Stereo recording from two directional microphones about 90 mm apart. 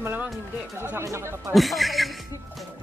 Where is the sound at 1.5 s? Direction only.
Centre (ahead or behind).